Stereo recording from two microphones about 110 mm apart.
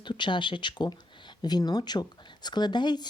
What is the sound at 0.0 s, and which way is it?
Speech, 45° left (ahead or behind).